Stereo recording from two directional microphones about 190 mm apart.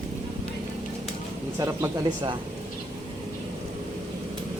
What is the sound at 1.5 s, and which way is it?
Speech, 20° right (ahead or behind).